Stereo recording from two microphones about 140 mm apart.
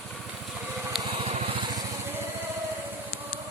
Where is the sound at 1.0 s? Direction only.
40° right (ahead or behind).